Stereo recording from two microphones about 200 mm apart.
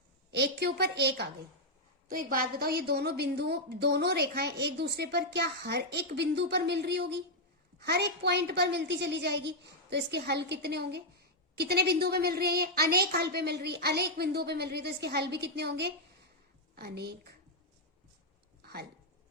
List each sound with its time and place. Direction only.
0.3 s a woman's voice: 55° right (ahead or behind)
2.0 s a woman's voice: 45° right (ahead or behind)
18.6 s a sound: 50° right (ahead or behind)